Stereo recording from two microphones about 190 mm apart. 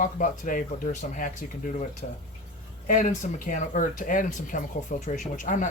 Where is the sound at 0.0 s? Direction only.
45° left (ahead or behind).